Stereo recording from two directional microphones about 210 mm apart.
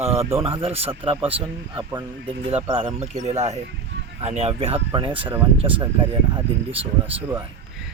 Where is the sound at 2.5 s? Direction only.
25° right (ahead or behind).